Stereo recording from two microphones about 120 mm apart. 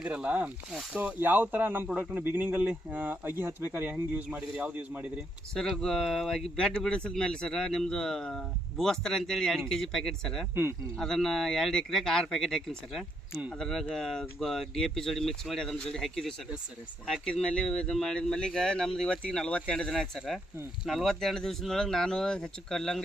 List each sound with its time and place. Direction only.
0.0 s speech: 10° right (ahead or behind)
5.5 s speech: 5° left (ahead or behind)
10.5 s speech: 20° right (ahead or behind)
10.9 s speech: 5° left (ahead or behind)